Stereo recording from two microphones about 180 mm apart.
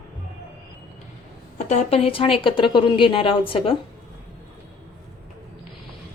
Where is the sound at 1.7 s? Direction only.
35° left (ahead or behind).